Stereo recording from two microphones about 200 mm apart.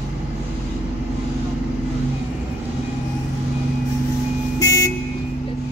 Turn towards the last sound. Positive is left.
turn(degrees=15)  # may be behind; listen again after turning